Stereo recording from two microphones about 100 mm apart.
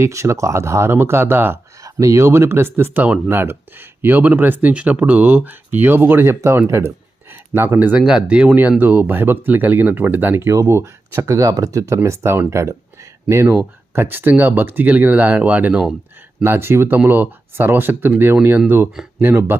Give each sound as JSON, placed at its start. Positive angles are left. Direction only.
{"t": 0.0, "sound": "speech", "side_deg": -30}
{"t": 19.2, "sound": "speech", "side_deg": -20}